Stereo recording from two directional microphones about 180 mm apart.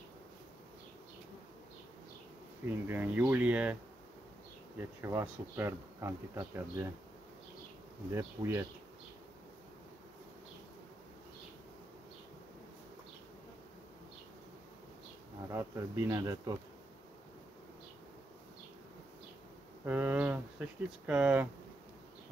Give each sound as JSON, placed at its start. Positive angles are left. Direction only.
{"t": 2.9, "sound": "speech", "side_deg": -10}
{"t": 4.7, "sound": "speech", "side_deg": -10}
{"t": 8.1, "sound": "speech", "side_deg": -15}
{"t": 15.5, "sound": "speech", "side_deg": -15}
{"t": 19.8, "sound": "speech", "side_deg": -10}